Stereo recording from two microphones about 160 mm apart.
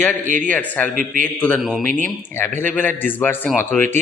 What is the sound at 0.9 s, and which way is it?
Speech, 55° right (ahead or behind).